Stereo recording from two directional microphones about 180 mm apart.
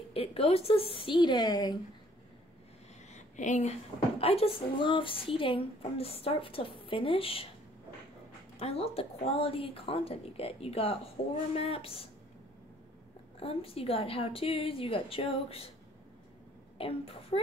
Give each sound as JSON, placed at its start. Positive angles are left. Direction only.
{"t": 0.1, "sound": "speech", "side_deg": 30}
{"t": 3.1, "sound": "a sound", "side_deg": 40}
{"t": 4.2, "sound": "a woman's voice", "side_deg": 35}
{"t": 8.5, "sound": "a woman's voice", "side_deg": 35}
{"t": 13.4, "sound": "a woman's voice", "side_deg": 30}
{"t": 16.7, "sound": "a woman's voice", "side_deg": 30}